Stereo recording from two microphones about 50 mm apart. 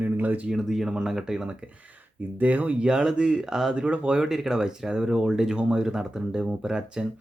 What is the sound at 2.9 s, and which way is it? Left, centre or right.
Speech, centre.